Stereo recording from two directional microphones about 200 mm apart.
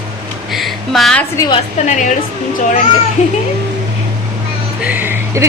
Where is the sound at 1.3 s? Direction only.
15° left (ahead or behind).